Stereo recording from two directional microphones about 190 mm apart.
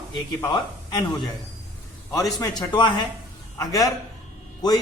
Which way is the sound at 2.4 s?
20° left (ahead or behind).